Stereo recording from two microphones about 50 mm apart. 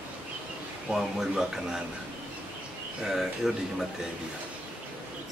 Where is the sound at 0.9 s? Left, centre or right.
Right.